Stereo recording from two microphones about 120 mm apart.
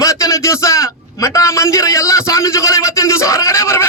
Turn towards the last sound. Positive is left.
turn(degrees=25)  # may be behind; listen again after turning